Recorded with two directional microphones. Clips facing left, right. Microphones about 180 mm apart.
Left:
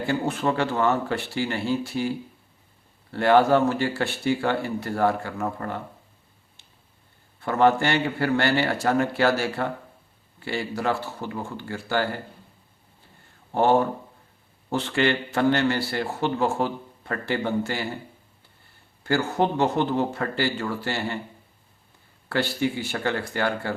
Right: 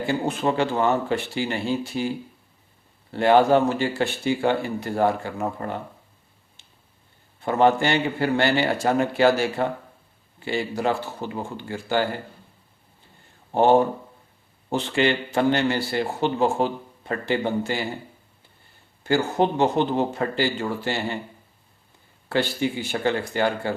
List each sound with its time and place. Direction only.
0.0 s speech: 20° right (ahead or behind)
7.4 s speech: 20° right (ahead or behind)
13.5 s speech: 20° right (ahead or behind)
19.0 s speech: 20° right (ahead or behind)
22.3 s speech: 20° right (ahead or behind)